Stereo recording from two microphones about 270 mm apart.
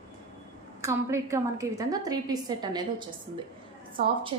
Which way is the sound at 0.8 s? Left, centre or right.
Centre.